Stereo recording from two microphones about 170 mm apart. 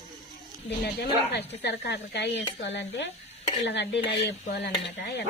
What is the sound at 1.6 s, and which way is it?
A woman's voice, 85° left.